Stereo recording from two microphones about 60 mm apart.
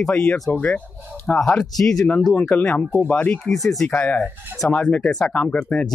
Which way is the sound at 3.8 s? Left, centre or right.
Left.